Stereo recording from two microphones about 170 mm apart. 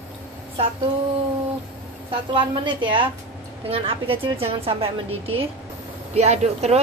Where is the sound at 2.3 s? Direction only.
30° right (ahead or behind).